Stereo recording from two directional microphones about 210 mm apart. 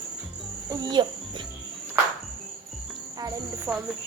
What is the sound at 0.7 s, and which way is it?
Speech, 20° right (ahead or behind).